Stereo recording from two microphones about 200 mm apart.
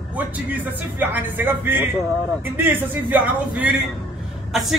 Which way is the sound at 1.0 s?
10° right (ahead or behind).